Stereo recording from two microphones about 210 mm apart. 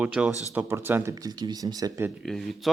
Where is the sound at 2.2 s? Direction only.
Centre (ahead or behind).